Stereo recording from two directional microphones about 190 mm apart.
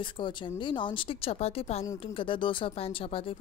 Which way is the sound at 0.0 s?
25° left (ahead or behind).